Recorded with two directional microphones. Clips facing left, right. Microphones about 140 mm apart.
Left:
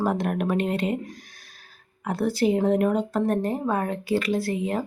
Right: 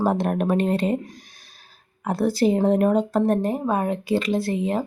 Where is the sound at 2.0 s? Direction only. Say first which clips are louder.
Right 3 dB; 35° right (ahead or behind).